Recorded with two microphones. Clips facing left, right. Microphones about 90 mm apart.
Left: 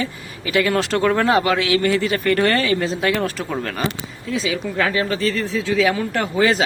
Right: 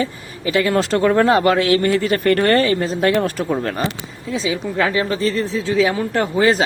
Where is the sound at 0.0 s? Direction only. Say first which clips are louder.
Right 4 dB; 30° right (ahead or behind).